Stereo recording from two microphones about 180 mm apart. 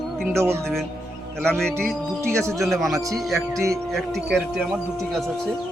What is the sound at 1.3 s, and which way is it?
Speech, 5° left (ahead or behind).